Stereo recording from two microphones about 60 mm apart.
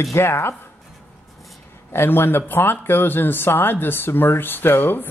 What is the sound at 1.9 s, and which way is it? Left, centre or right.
Speech, left.